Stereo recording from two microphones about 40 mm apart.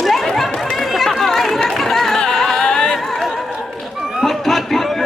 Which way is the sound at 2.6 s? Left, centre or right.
Left.